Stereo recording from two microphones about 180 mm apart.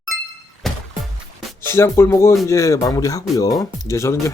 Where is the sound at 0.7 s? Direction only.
Centre (ahead or behind).